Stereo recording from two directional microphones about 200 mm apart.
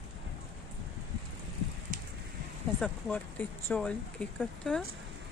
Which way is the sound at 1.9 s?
40° right (ahead or behind).